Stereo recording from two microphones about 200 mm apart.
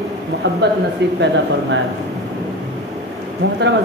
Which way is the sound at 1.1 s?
65° right (ahead or behind).